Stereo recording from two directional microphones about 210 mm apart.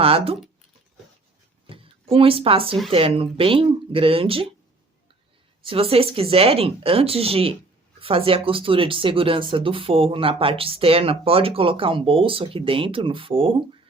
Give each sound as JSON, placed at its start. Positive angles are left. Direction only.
{"t": 0.0, "sound": "speech", "side_deg": -25}
{"t": 1.7, "sound": "speech", "side_deg": -25}
{"t": 5.6, "sound": "speech", "side_deg": -25}